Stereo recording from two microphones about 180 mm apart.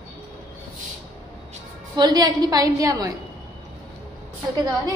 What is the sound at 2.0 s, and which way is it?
A woman's voice, 25° right (ahead or behind).